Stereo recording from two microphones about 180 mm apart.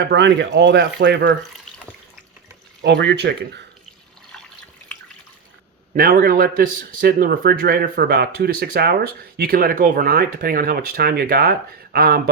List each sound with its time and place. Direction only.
0.1 s speech: 75° right (ahead or behind)
2.8 s speech: 70° right (ahead or behind)
5.9 s a man's voice: 50° right (ahead or behind)